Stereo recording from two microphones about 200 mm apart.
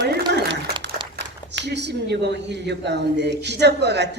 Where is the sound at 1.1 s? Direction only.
60° right (ahead or behind).